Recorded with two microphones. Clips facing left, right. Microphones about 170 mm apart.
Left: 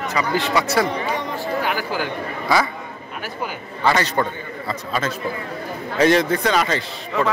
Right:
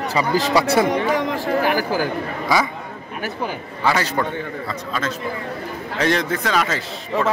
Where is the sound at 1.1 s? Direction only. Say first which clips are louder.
Right 5 dB; 90° right.